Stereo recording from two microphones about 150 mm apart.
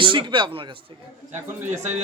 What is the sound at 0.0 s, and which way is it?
Speech, 35° right (ahead or behind).